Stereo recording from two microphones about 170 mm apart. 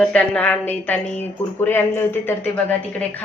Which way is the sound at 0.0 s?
5° left (ahead or behind).